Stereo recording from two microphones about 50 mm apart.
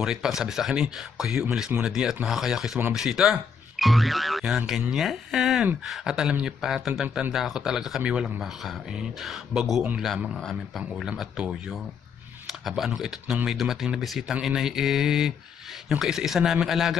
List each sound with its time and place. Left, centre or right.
0.0 s speech: centre
4.5 s speech: centre
8.4 s speech: centre